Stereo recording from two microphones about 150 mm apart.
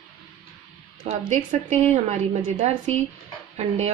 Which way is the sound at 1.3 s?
55° right (ahead or behind).